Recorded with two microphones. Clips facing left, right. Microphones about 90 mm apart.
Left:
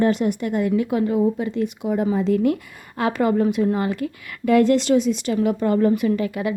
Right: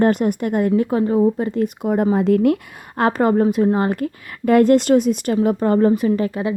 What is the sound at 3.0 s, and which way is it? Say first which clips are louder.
A woman's voice: right 3 dB; 45° right (ahead or behind).